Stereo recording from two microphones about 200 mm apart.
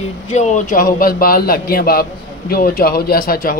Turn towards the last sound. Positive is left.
turn(degrees=45)  # may be behind; listen again after turning